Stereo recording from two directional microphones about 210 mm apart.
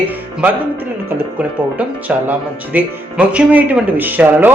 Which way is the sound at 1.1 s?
5° right (ahead or behind).